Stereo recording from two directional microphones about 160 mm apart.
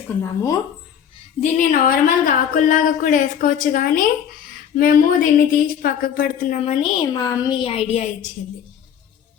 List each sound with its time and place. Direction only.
0.2 s a woman's voice: 20° left (ahead or behind)
1.4 s speech: 55° left (ahead or behind)
7.1 s a woman's voice: 20° left (ahead or behind)
7.6 s a woman's voice: 40° left (ahead or behind)